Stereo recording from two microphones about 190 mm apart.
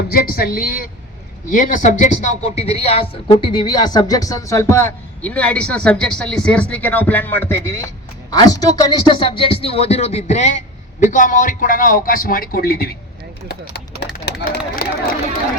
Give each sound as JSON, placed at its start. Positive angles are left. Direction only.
{"t": 0.1, "sound": "a man's voice", "side_deg": 50}
{"t": 13.5, "sound": "a sound", "side_deg": 60}
{"t": 14.8, "sound": "a man's voice", "side_deg": 50}